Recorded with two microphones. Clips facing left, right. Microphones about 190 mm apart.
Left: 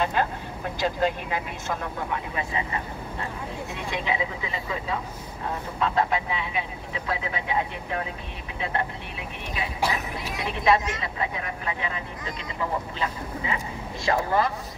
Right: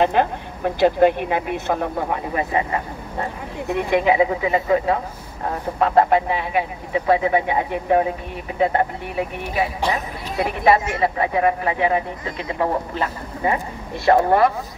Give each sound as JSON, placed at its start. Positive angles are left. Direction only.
{"t": 0.0, "sound": "speech", "side_deg": -60}
{"t": 10.4, "sound": "speech", "side_deg": -60}
{"t": 14.0, "sound": "speech", "side_deg": -60}